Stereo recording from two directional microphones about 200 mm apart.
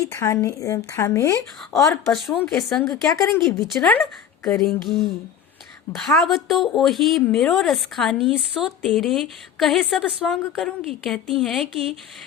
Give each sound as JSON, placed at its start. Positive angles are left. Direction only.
{"t": 0.0, "sound": "a woman's voice", "side_deg": 15}
{"t": 2.0, "sound": "a woman's voice", "side_deg": 0}
{"t": 2.8, "sound": "a woman's voice", "side_deg": 15}
{"t": 3.7, "sound": "a woman's voice", "side_deg": 5}